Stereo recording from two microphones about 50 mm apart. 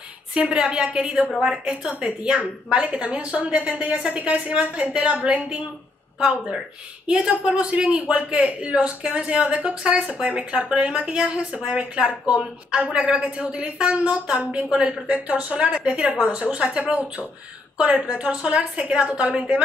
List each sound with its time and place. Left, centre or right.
0.3 s a woman's voice: centre
7.1 s a woman's voice: centre